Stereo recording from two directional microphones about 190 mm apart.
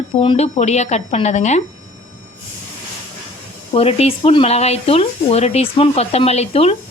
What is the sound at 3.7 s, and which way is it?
A woman's voice, 30° left (ahead or behind).